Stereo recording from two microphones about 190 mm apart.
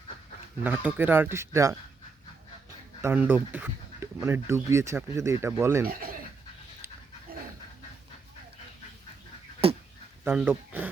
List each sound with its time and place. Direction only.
0.6 s speech: 10° right (ahead or behind)
3.0 s speech: 10° right (ahead or behind)
9.6 s a sound: 30° right (ahead or behind)
10.2 s speech: 10° right (ahead or behind)